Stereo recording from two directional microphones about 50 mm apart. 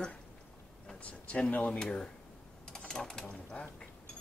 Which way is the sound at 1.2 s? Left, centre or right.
Left.